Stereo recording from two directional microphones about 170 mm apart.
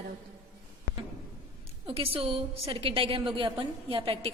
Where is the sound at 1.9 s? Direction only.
35° right (ahead or behind).